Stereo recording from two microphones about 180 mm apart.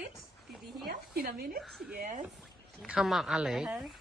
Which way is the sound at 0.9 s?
55° right (ahead or behind).